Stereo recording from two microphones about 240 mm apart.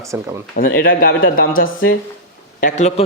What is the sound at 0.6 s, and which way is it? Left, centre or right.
A man's voice, left.